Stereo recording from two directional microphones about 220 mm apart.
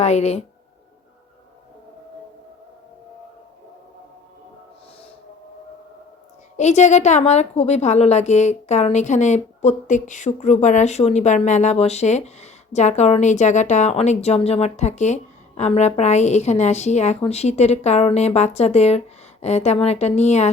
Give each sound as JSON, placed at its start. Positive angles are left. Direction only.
{"t": 0.0, "sound": "speech", "side_deg": 30}
{"t": 6.6, "sound": "a woman's voice", "side_deg": 30}